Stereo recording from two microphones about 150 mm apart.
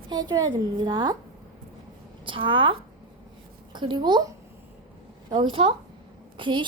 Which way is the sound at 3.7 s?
30° right (ahead or behind).